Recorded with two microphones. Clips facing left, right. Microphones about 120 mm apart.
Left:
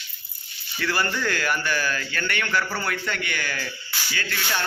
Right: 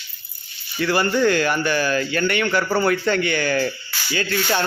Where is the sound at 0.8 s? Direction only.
20° right (ahead or behind).